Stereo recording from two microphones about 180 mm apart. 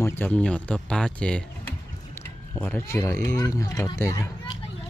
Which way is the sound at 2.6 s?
10° left (ahead or behind).